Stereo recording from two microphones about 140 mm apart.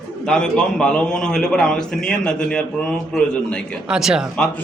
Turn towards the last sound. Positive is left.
turn(degrees=-5)  # may be behind; listen again after turning